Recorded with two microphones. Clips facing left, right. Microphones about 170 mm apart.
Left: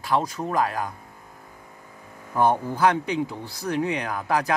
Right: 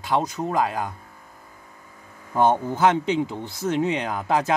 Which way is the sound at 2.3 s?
20° right (ahead or behind).